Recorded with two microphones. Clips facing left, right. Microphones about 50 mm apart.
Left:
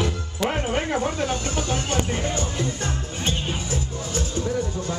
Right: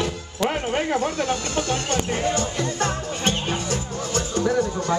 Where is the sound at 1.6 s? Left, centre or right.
Right.